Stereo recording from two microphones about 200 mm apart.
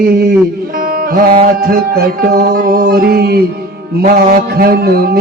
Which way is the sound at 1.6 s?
50° right (ahead or behind).